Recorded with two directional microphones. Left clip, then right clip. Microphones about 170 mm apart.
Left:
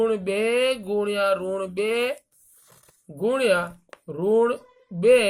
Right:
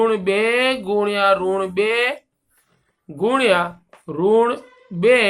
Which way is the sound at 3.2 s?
25° left (ahead or behind).